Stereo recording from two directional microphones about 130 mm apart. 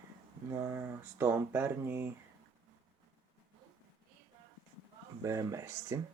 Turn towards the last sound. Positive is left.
turn(degrees=-25)  # may be behind; listen again after turning